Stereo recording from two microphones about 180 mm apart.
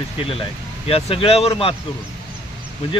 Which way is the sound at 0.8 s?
30° left (ahead or behind).